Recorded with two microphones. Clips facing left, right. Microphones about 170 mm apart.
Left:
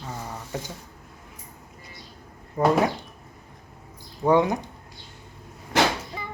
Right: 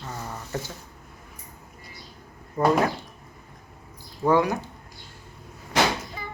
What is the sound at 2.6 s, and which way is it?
Speech, 10° left (ahead or behind).